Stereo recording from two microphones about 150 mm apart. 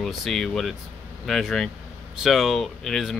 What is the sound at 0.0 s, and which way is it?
Speech, centre (ahead or behind).